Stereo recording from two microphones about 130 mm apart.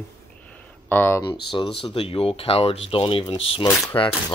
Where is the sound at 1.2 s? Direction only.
40° left (ahead or behind).